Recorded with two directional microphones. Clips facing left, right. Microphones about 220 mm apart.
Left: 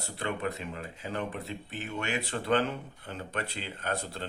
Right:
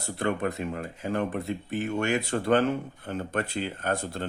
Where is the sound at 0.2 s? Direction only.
45° right (ahead or behind).